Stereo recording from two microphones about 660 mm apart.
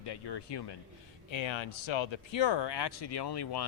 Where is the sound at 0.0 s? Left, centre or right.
Left.